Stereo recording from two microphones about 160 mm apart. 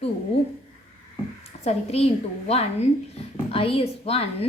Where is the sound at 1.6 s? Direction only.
40° left (ahead or behind).